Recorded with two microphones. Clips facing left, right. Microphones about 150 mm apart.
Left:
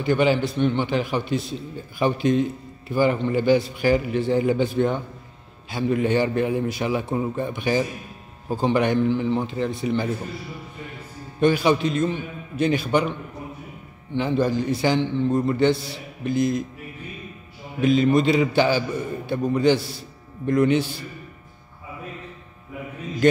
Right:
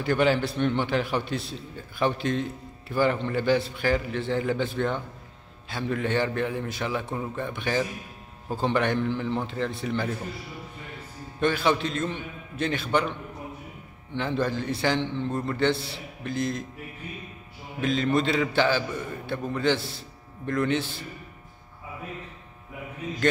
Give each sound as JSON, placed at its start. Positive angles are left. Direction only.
{"t": 0.0, "sound": "a man's voice", "side_deg": 0}
{"t": 11.3, "sound": "a man's voice", "side_deg": 10}
{"t": 14.1, "sound": "a man's voice", "side_deg": 5}
{"t": 15.7, "sound": "a man's voice", "side_deg": -30}
{"t": 16.3, "sound": "a man's voice", "side_deg": 10}
{"t": 17.7, "sound": "a man's voice", "side_deg": 10}
{"t": 19.8, "sound": "a man's voice", "side_deg": -25}
{"t": 20.4, "sound": "a man's voice", "side_deg": 15}